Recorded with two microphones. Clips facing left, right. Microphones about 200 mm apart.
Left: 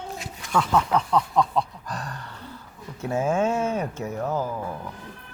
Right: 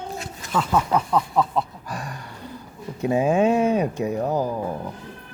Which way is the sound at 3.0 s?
15° right (ahead or behind).